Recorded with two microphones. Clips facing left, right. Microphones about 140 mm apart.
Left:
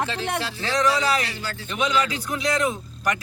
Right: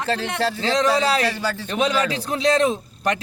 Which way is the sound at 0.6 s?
20° right (ahead or behind).